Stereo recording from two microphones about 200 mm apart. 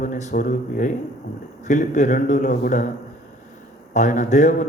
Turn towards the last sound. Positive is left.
turn(degrees=40)  # may be behind; listen again after turning